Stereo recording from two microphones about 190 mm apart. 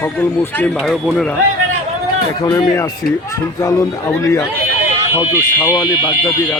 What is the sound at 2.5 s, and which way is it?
Speech, 15° left (ahead or behind).